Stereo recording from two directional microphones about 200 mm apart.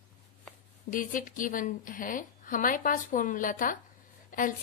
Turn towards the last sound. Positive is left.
turn(degrees=40)  # may be behind; listen again after turning